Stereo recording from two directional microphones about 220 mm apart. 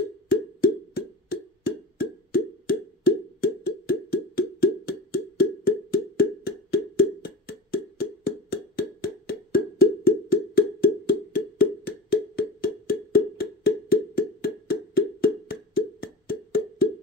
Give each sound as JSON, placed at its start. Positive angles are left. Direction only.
{"t": 0.3, "sound": "plop", "side_deg": 45}
{"t": 5.9, "sound": "wood block", "side_deg": 45}